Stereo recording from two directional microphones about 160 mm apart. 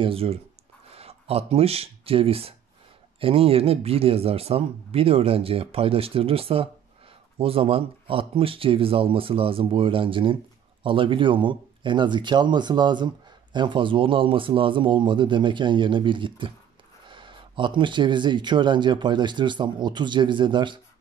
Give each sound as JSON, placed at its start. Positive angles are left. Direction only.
{"t": 0.0, "sound": "speech", "side_deg": -35}